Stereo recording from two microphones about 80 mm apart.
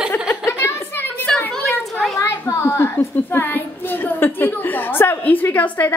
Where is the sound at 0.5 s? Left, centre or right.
Left.